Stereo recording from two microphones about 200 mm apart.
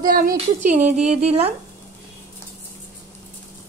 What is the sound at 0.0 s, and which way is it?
Speech, 45° right (ahead or behind).